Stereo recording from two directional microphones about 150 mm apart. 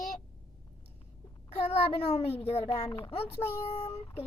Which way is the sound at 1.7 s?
40° left (ahead or behind).